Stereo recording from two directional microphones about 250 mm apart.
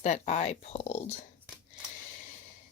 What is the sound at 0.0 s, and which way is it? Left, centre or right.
Speech, left.